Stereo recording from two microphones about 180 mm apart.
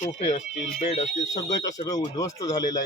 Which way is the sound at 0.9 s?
35° left (ahead or behind).